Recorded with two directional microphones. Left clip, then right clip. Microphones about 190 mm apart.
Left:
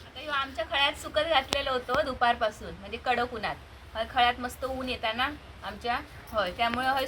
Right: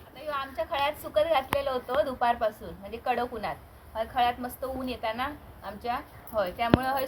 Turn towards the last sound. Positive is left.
turn(degrees=-15)  # may be behind; listen again after turning